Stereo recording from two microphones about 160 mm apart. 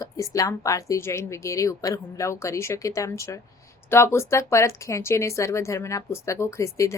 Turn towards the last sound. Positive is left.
turn(degrees=20)  # may be behind; listen again after turning